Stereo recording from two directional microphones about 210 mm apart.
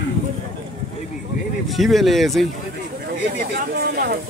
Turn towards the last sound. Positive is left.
turn(degrees=-45)  # may be behind; listen again after turning